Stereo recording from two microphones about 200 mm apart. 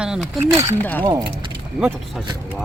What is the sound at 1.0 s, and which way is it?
Speech, 20° right (ahead or behind).